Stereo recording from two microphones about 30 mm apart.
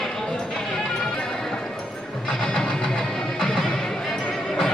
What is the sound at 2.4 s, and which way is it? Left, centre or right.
Music, centre.